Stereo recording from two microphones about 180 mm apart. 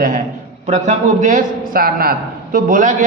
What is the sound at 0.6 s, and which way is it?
A man's voice, 40° right (ahead or behind).